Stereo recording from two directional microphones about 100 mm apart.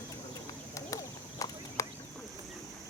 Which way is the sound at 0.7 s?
35° left (ahead or behind).